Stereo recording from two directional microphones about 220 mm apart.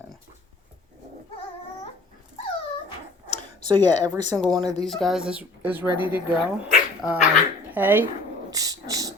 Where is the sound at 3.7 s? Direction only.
20° right (ahead or behind).